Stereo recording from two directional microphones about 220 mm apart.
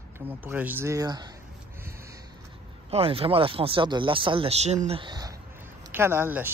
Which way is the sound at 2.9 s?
25° right (ahead or behind).